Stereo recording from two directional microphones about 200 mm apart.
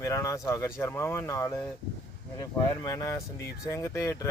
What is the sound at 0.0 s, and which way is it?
Speech, 15° left (ahead or behind).